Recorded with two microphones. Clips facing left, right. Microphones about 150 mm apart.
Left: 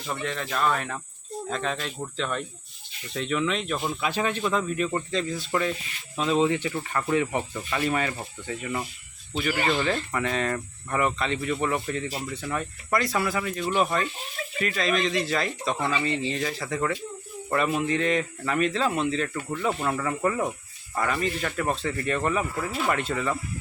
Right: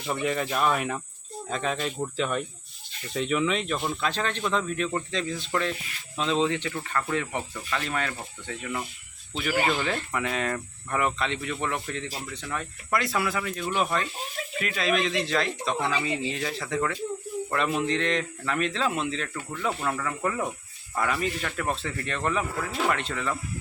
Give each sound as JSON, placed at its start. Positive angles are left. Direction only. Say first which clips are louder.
{"t": 0.1, "sound": "speech", "louder": "right 3 dB", "side_deg": -10}